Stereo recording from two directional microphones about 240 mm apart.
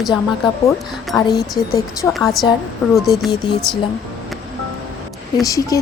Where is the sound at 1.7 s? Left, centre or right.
Centre.